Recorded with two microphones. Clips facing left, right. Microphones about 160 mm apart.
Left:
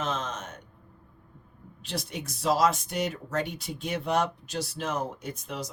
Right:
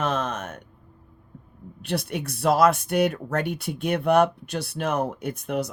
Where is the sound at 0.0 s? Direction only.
60° right (ahead or behind).